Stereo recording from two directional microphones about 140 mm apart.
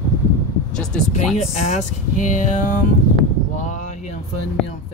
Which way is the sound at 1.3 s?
55° left (ahead or behind).